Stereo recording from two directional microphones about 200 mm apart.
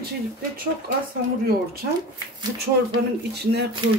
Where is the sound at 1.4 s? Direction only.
50° right (ahead or behind).